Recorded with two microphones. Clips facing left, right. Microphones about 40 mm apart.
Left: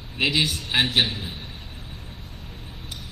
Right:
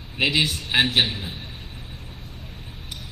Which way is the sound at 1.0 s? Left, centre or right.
Right.